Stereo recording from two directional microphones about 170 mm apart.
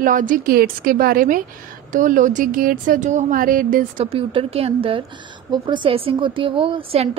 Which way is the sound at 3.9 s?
30° right (ahead or behind).